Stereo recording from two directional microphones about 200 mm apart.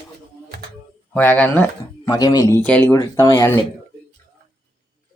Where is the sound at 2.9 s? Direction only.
20° left (ahead or behind).